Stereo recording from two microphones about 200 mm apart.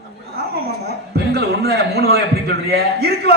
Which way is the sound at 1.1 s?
55° right (ahead or behind).